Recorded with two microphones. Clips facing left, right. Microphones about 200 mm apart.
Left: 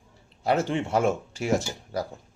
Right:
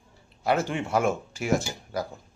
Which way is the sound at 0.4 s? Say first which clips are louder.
Left 1 dB; 30° left (ahead or behind).